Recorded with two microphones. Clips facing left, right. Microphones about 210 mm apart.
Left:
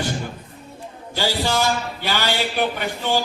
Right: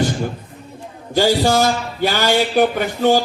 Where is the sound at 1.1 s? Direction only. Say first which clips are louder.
Right 7 dB; 45° right (ahead or behind).